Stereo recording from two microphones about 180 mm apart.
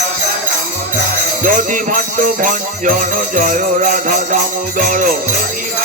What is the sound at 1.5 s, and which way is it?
Music, 50° right (ahead or behind).